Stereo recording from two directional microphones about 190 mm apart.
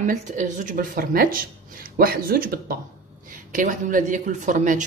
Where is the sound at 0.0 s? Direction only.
40° right (ahead or behind).